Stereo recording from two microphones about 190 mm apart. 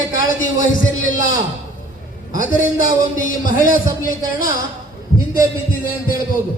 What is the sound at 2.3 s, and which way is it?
A man's voice, 45° left (ahead or behind).